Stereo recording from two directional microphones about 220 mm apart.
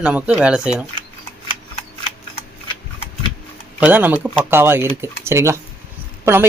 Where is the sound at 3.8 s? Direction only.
5° right (ahead or behind).